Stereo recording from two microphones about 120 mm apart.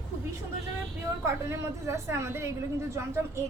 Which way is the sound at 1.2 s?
25° right (ahead or behind).